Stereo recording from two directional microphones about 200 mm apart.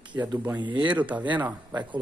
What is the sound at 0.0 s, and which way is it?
Speech, 20° right (ahead or behind).